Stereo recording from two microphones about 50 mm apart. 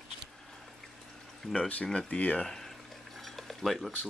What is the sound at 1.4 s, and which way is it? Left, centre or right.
Speech, centre.